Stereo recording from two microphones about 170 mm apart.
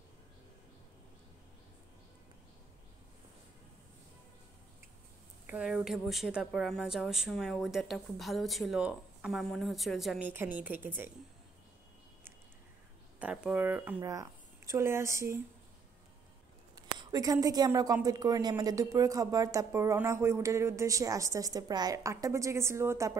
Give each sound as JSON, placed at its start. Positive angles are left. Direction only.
{"t": 5.5, "sound": "a woman's voice", "side_deg": -5}
{"t": 13.2, "sound": "speech", "side_deg": -5}
{"t": 16.7, "sound": "speech", "side_deg": -20}